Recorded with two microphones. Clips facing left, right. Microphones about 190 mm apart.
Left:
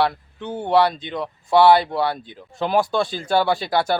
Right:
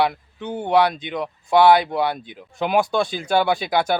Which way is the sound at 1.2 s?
15° right (ahead or behind).